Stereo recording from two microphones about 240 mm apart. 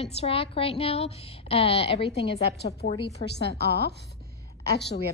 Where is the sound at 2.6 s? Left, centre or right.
Left.